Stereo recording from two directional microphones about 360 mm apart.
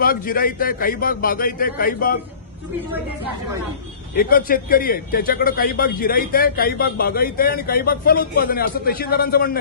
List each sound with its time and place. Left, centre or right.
0.0 s a man's voice: left
4.1 s a man's voice: left